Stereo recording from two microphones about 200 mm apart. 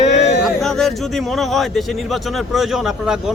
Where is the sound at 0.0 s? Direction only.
35° left (ahead or behind).